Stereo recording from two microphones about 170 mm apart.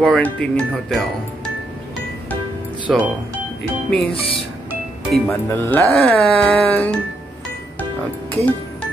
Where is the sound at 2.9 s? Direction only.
Centre (ahead or behind).